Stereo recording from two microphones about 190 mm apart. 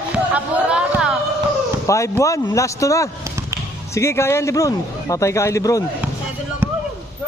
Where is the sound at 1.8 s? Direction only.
15° left (ahead or behind).